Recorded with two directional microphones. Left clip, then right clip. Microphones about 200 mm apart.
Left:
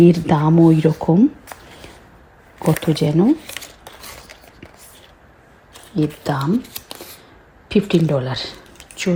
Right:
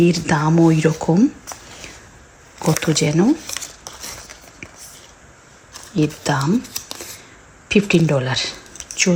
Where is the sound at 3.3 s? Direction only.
5° right (ahead or behind).